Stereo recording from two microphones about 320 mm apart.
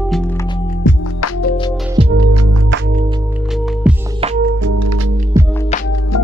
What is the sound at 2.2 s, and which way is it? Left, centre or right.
Music, right.